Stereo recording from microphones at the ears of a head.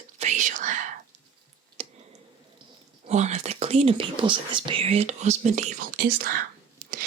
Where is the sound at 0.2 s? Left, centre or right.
Right.